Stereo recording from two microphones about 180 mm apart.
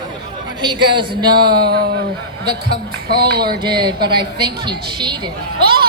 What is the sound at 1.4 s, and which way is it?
Speech, 60° right (ahead or behind).